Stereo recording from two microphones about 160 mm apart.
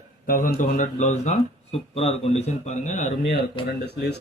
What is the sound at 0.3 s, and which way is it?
Speech, 55° left (ahead or behind).